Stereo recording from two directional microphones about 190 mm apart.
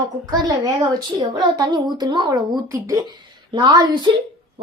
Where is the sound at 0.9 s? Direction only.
20° right (ahead or behind).